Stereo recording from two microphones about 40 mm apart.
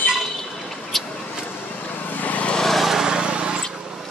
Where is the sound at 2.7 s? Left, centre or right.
Centre.